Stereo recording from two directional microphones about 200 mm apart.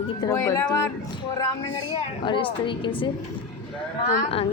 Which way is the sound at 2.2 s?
25° left (ahead or behind).